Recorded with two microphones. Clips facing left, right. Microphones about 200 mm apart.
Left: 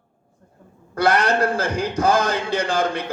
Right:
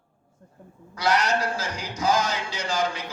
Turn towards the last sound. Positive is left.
turn(degrees=55)  # may be behind; listen again after turning